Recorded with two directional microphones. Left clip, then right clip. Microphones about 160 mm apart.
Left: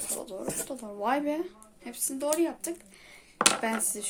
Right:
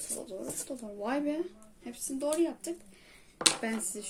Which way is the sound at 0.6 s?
15° left (ahead or behind).